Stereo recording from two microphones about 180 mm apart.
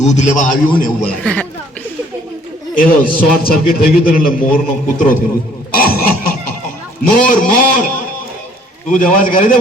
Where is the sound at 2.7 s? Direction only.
50° left (ahead or behind).